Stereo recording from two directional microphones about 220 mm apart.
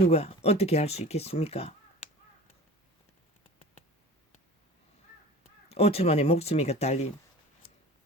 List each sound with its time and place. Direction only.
0.1 s speech: 30° left (ahead or behind)
5.6 s speech: 25° left (ahead or behind)